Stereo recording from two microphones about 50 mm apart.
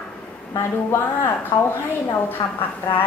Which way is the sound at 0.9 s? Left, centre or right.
Left.